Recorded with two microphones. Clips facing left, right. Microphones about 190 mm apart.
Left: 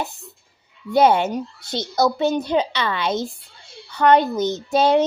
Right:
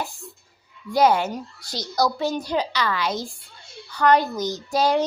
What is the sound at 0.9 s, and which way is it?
Speech, 25° left (ahead or behind).